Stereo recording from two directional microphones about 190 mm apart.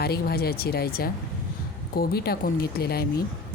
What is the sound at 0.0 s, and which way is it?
Speech, 55° left (ahead or behind).